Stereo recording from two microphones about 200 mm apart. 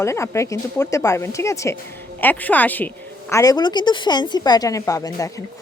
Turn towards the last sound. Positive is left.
turn(degrees=15)  # may be behind; listen again after turning